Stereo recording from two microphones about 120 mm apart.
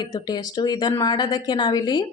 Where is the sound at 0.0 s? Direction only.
35° left (ahead or behind).